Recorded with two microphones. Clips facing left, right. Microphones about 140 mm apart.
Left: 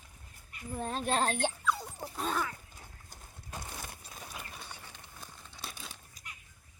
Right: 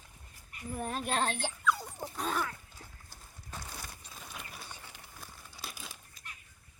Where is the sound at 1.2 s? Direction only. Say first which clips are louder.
Left 3 dB; 45° left (ahead or behind).